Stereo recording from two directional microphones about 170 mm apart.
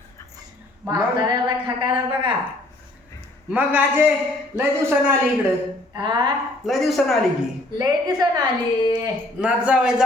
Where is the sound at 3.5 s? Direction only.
10° right (ahead or behind).